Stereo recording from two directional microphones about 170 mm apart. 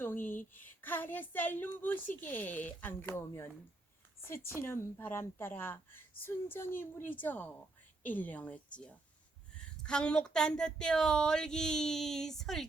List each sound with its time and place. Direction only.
0.0 s a sound: 10° left (ahead or behind)
0.5 s a woman's voice: 10° left (ahead or behind)
4.6 s a woman's voice: 15° left (ahead or behind)